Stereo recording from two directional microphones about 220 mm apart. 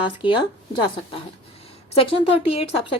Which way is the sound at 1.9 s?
25° left (ahead or behind).